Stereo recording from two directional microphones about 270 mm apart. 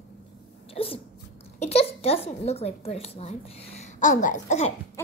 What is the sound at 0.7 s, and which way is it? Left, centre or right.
Speech, left.